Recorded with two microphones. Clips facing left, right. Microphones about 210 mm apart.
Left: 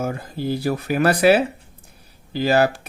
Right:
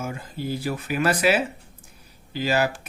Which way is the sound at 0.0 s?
40° left (ahead or behind).